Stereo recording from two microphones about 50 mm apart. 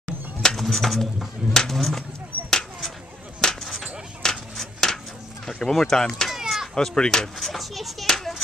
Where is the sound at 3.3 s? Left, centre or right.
Centre.